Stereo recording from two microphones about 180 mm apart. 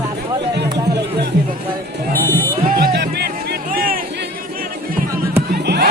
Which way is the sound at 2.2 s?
15° left (ahead or behind).